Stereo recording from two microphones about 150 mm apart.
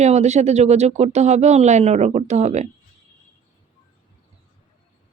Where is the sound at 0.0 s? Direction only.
50° right (ahead or behind).